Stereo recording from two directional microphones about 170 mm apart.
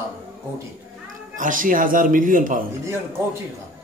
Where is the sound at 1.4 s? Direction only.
50° right (ahead or behind).